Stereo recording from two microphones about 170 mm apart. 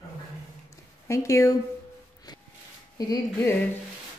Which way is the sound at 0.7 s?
20° left (ahead or behind).